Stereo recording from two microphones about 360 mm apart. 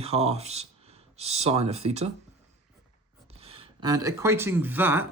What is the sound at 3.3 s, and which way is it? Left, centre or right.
Speech, centre.